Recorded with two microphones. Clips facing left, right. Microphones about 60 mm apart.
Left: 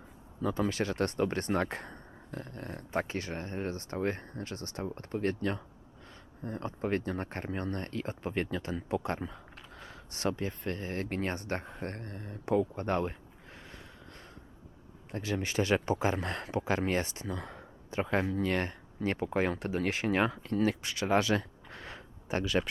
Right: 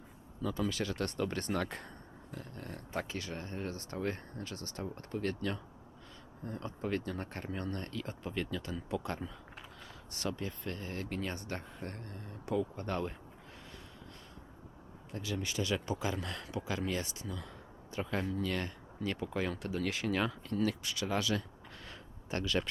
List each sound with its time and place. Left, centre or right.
0.4 s speech: left
15.1 s speech: left
21.8 s a sound: left